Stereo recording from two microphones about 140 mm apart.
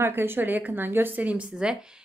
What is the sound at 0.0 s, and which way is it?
A woman's voice, 15° right (ahead or behind).